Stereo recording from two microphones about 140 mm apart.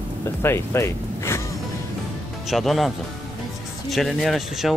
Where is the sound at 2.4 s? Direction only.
Centre (ahead or behind).